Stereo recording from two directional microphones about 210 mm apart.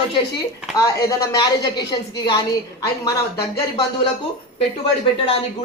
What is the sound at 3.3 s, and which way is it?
Speech, 50° left (ahead or behind).